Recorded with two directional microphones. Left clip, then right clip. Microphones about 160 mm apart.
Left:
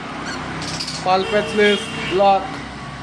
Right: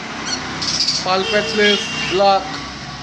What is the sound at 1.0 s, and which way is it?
Speech, centre (ahead or behind).